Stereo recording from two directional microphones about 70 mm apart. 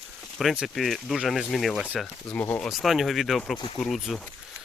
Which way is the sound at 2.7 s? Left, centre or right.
Centre.